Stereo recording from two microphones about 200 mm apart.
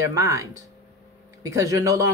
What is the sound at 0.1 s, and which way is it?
Speech, 15° right (ahead or behind).